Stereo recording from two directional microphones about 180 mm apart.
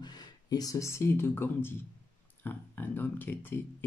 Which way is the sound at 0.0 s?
25° left (ahead or behind).